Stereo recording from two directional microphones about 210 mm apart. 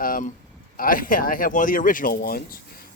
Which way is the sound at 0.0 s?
40° left (ahead or behind).